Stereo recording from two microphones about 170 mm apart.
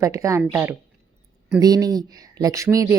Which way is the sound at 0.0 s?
20° right (ahead or behind).